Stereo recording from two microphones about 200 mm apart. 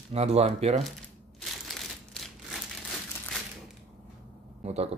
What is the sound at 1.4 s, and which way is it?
Crumpling, centre (ahead or behind).